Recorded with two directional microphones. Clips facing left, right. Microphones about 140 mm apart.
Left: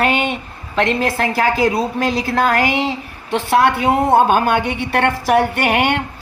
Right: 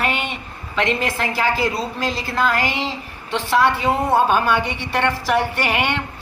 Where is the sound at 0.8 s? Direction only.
40° left (ahead or behind).